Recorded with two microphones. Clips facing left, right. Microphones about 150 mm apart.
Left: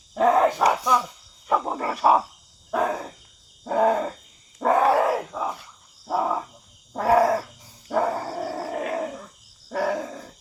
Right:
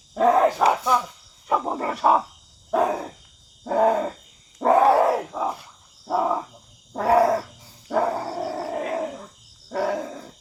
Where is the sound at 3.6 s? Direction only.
10° right (ahead or behind).